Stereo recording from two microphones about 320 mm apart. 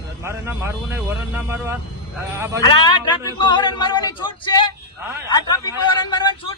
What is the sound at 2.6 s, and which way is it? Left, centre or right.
Speech, centre.